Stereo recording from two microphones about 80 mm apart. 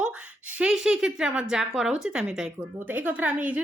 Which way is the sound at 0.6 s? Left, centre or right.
Centre.